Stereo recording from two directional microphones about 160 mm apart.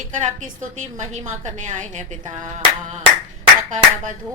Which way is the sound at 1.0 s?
45° right (ahead or behind).